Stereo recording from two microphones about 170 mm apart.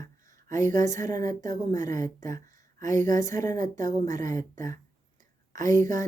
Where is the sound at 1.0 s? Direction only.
45° right (ahead or behind).